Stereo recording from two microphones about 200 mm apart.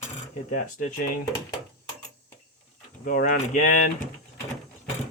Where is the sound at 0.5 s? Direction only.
40° left (ahead or behind).